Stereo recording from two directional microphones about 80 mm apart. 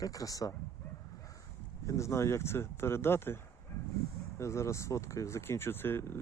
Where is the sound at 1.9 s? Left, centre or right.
Left.